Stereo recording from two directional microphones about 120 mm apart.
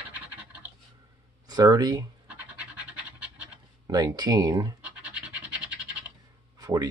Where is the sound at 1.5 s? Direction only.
35° right (ahead or behind).